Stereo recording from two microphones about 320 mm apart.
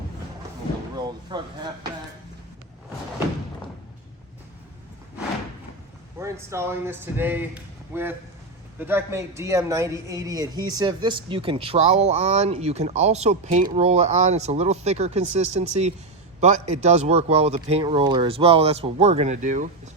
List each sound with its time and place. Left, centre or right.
1.0 s speech: centre
6.1 s speech: centre